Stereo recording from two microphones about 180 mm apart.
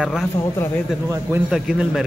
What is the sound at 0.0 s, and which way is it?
Speech, 5° right (ahead or behind).